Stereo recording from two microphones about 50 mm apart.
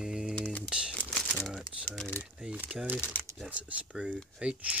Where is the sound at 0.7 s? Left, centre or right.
Centre.